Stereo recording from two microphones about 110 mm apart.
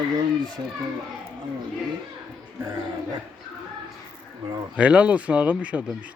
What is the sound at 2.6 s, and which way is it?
Speech, 30° right (ahead or behind).